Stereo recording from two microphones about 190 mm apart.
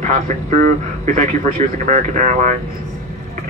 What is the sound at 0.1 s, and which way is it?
Speech, 40° right (ahead or behind).